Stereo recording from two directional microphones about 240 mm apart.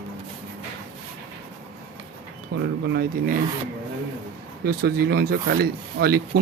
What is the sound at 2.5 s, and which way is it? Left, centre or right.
Speech, right.